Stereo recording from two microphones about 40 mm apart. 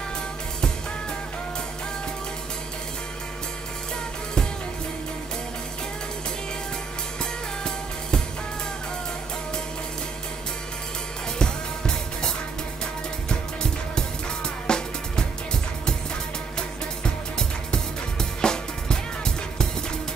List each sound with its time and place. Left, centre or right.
11.3 s music: centre
18.4 s music: centre